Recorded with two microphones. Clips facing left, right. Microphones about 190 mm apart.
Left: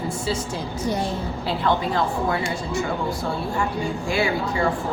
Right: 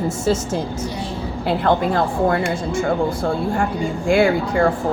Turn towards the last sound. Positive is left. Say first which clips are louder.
# right 6 dB
turn(degrees=-55)  # may be behind; listen again after turning